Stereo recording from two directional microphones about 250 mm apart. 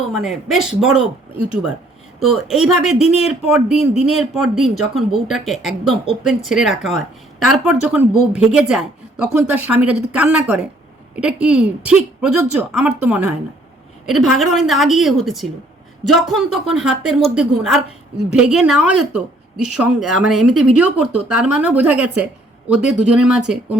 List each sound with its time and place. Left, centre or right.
0.1 s speech: centre
3.0 s speech: left
3.2 s speech: centre